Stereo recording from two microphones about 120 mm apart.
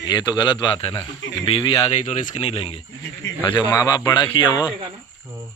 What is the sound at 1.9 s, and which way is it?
Speech, 85° left.